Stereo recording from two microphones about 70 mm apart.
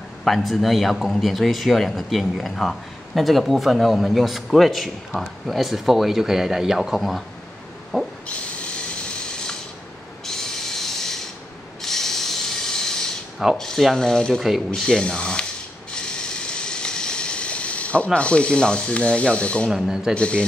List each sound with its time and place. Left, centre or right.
0.2 s speech: centre
7.9 s owl: centre
10.2 s owl: centre
11.8 s rub: centre
13.6 s speech: centre
15.9 s a sound: centre
19.7 s speech: centre
20.2 s speech: centre